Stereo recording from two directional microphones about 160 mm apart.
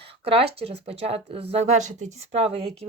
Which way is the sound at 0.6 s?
40° right (ahead or behind).